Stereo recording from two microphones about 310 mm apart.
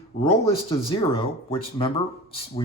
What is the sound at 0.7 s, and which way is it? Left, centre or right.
Speech, centre.